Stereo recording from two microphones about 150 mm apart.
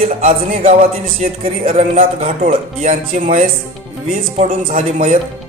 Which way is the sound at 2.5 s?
55° right (ahead or behind).